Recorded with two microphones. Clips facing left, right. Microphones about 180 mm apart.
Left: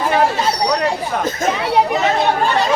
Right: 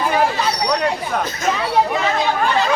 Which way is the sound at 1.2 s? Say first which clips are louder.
Left 4 dB; 45° left (ahead or behind).